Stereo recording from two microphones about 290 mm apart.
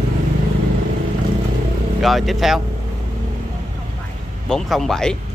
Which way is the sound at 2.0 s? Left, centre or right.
Centre.